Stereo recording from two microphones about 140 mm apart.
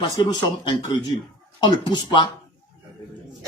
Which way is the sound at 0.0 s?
35° left (ahead or behind).